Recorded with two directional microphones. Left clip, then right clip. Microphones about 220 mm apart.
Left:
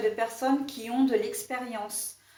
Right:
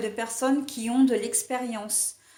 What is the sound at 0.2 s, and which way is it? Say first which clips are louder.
Speech: right 1 dB; 45° right (ahead or behind).